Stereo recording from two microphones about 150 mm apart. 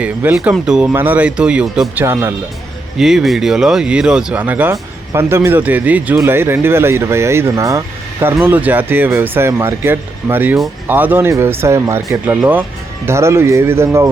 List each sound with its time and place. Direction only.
0.0 s speech: 10° right (ahead or behind)
2.0 s speech: 15° right (ahead or behind)
3.0 s speech: 5° right (ahead or behind)